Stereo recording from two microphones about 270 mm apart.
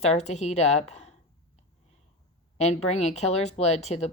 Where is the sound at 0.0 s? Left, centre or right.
Left.